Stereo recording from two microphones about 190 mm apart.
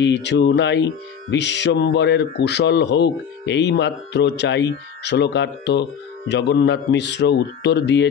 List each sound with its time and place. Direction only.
0.0 s speech: 65° left (ahead or behind)